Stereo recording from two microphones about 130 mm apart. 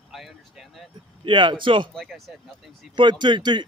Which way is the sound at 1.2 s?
40° right (ahead or behind).